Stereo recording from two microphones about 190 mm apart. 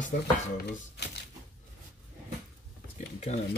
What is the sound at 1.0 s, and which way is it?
Typewriter, 60° left (ahead or behind).